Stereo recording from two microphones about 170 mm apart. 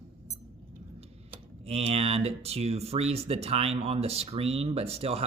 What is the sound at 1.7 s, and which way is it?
Speech, 35° right (ahead or behind).